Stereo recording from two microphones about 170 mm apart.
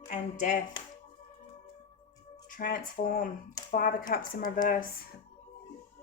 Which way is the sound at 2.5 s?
55° left (ahead or behind).